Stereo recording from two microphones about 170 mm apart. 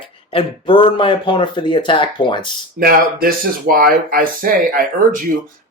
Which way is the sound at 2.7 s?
60° right (ahead or behind).